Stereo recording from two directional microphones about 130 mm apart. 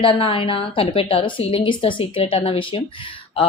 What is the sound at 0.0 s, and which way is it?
A woman's voice, 40° left (ahead or behind).